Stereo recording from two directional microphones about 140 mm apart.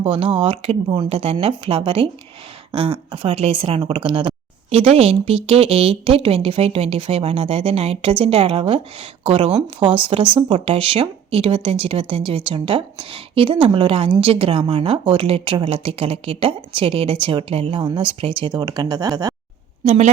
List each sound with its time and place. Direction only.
0.0 s speech: 40° right (ahead or behind)
19.8 s a woman's voice: 50° right (ahead or behind)